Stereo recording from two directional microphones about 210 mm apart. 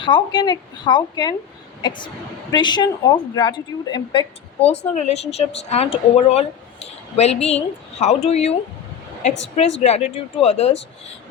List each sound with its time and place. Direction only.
0.0 s speech: 20° left (ahead or behind)
2.5 s a woman's voice: 20° left (ahead or behind)
9.8 s a woman's voice: 30° left (ahead or behind)